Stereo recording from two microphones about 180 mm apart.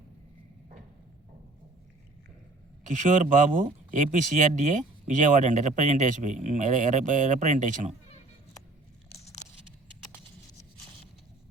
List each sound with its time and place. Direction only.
2.9 s speech: 45° right (ahead or behind)